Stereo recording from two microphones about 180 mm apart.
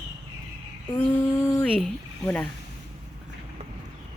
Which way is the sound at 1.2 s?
15° left (ahead or behind).